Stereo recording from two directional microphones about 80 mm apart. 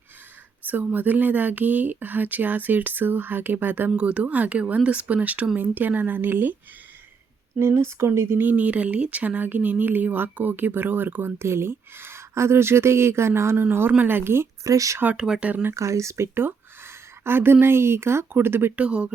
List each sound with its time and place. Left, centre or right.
0.6 s speech: right
7.6 s speech: right
14.7 s speech: right
15.1 s speech: centre
15.7 s speech: right
18.8 s speech: centre